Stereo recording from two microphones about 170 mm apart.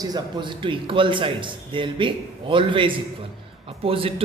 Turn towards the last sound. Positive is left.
turn(degrees=-35)  # may be behind; listen again after turning